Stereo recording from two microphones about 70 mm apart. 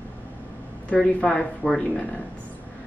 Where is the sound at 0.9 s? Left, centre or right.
Centre.